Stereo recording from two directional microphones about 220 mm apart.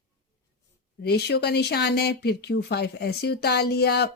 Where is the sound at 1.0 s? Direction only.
50° left (ahead or behind).